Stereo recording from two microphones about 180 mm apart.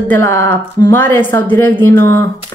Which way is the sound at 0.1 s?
15° left (ahead or behind).